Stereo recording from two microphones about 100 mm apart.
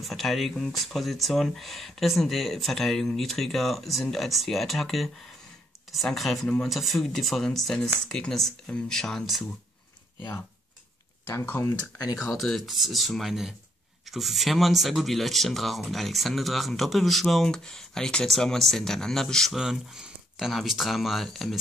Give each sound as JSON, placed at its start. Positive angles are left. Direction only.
{"t": 0.0, "sound": "speech", "side_deg": 0}
{"t": 11.2, "sound": "speech", "side_deg": 20}
{"t": 12.2, "sound": "speech", "side_deg": 0}